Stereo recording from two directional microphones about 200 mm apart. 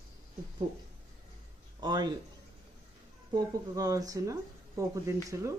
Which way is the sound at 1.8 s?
20° right (ahead or behind).